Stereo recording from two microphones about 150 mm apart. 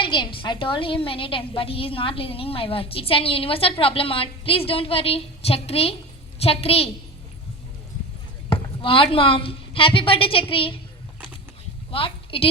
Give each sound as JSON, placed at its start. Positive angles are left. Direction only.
{"t": 0.0, "sound": "a woman's voice", "side_deg": 30}
{"t": 8.4, "sound": "a woman's voice", "side_deg": 35}
{"t": 11.9, "sound": "a woman's voice", "side_deg": 35}